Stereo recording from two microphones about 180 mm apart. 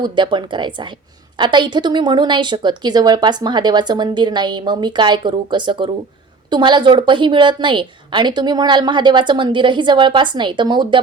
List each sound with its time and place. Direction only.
0.0 s a woman's voice: 25° right (ahead or behind)